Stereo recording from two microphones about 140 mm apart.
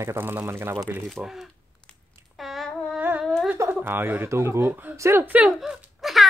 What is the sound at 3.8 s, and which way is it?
Speech, 15° right (ahead or behind).